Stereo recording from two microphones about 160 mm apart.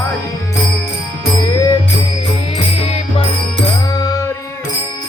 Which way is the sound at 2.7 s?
40° left (ahead or behind).